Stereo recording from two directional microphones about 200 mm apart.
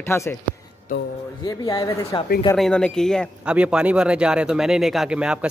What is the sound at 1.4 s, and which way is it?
Speech, 15° left (ahead or behind).